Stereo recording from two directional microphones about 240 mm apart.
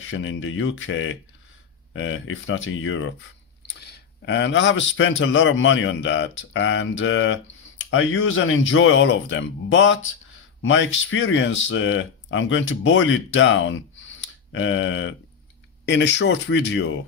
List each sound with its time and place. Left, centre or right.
0.0 s speech: left